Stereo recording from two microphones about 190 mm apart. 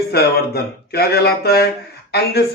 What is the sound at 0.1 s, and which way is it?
Speech, 55° left (ahead or behind).